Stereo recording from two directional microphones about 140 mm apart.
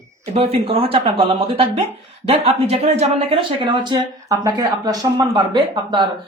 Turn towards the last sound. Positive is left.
turn(degrees=-35)  # may be behind; listen again after turning